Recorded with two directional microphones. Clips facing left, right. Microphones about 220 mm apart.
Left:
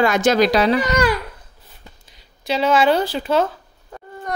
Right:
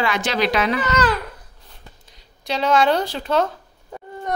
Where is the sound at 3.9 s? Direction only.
15° right (ahead or behind).